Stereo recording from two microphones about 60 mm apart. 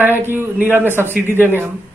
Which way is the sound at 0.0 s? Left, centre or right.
Right.